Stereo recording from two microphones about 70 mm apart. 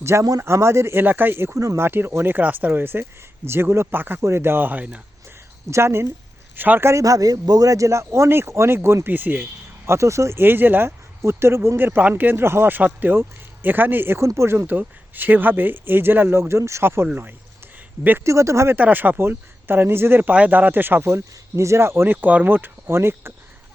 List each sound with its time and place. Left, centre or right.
0.0 s speech: right
1.0 s speech: right
5.7 s speech: right
6.9 s speech: right
9.0 s speech: right
18.2 s speech: right
18.8 s speech: right
20.3 s speech: right
21.1 s speech: right